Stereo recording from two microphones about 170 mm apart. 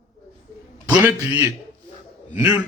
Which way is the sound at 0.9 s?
10° right (ahead or behind).